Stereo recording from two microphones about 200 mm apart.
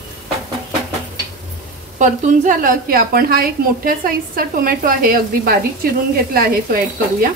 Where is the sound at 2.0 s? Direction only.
40° right (ahead or behind).